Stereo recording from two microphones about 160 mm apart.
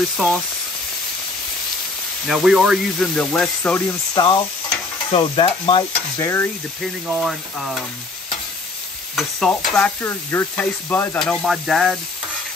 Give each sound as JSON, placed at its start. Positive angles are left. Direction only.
{"t": 0.2, "sound": "speech", "side_deg": -5}
{"t": 2.2, "sound": "speech", "side_deg": 0}
{"t": 4.1, "sound": "stir", "side_deg": 30}
{"t": 6.1, "sound": "sizzle", "side_deg": 15}
{"t": 7.1, "sound": "speech", "side_deg": -5}
{"t": 9.1, "sound": "speech", "side_deg": 0}
{"t": 9.7, "sound": "sizzle", "side_deg": 5}
{"t": 11.1, "sound": "speech", "side_deg": 0}